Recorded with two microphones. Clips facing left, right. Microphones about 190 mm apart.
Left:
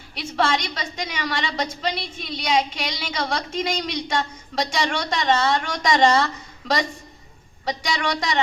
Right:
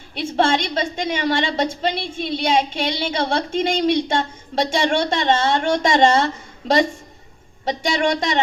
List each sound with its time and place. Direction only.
0.3 s a woman's voice: 25° right (ahead or behind)